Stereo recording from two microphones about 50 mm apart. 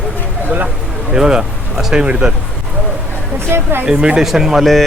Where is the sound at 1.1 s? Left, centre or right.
Centre.